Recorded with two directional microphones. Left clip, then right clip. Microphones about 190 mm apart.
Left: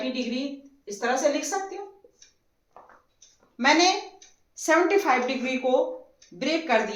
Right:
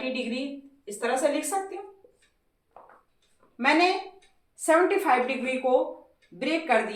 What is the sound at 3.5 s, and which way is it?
Speech, 35° left (ahead or behind).